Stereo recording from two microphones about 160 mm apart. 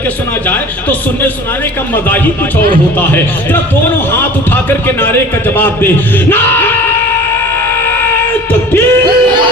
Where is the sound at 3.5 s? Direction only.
15° left (ahead or behind).